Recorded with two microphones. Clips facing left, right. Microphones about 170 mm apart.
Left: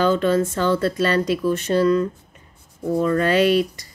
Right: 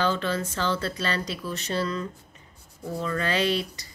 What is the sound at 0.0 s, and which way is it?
Speech, 45° left (ahead or behind).